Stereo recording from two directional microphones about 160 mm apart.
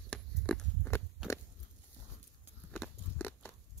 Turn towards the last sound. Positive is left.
turn(degrees=15)  # may be behind; listen again after turning